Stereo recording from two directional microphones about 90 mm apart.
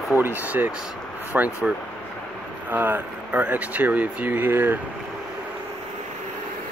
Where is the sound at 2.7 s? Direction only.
20° right (ahead or behind).